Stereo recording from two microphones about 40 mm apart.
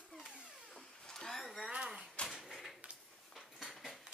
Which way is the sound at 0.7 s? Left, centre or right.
Centre.